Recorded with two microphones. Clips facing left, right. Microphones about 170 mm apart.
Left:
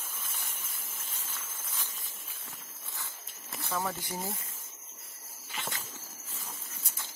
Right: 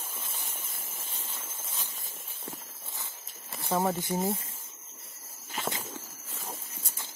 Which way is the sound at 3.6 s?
25° right (ahead or behind).